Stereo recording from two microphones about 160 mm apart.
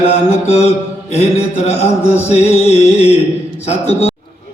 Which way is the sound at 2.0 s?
15° left (ahead or behind).